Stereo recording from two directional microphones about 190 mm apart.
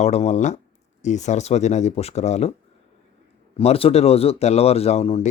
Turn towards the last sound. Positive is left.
turn(degrees=35)  # may be behind; listen again after turning